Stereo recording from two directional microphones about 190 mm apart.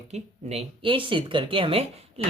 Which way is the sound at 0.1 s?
35° right (ahead or behind).